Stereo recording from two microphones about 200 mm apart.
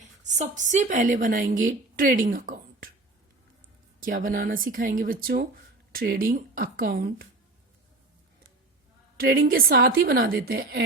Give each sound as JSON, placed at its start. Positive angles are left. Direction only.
{"t": 0.0, "sound": "a woman's voice", "side_deg": -35}
{"t": 4.0, "sound": "a woman's voice", "side_deg": -45}
{"t": 9.1, "sound": "a woman's voice", "side_deg": -50}